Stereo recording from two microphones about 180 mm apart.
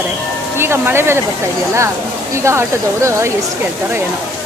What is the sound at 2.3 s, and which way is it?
Speech, 15° right (ahead or behind).